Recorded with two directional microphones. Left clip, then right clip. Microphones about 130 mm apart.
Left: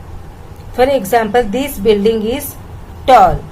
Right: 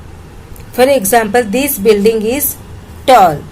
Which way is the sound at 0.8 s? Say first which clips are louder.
Right 2 dB; 35° right (ahead or behind).